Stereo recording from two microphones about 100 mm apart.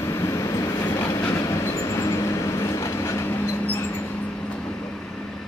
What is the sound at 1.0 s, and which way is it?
Train, 20° left (ahead or behind).